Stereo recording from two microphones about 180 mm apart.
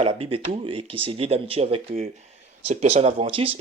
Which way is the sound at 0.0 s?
30° right (ahead or behind).